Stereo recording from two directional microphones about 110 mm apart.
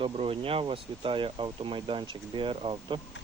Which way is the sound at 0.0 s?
60° right (ahead or behind).